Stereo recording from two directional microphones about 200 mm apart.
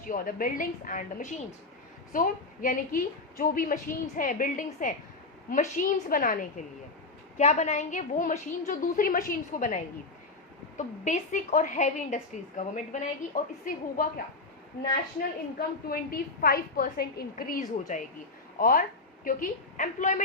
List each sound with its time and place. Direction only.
0.0 s a woman's voice: 45° left (ahead or behind)
7.3 s a woman's voice: 35° left (ahead or behind)
15.5 s a woman's voice: 50° left (ahead or behind)